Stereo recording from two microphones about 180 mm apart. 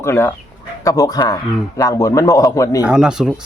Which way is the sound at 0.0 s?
15° left (ahead or behind).